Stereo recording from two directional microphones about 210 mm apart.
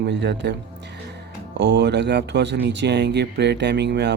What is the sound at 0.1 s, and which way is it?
Speech, 55° right (ahead or behind).